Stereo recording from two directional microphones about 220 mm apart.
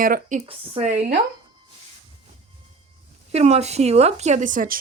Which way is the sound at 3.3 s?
30° right (ahead or behind).